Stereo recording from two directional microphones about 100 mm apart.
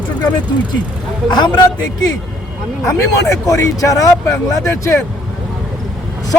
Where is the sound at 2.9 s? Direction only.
35° left (ahead or behind).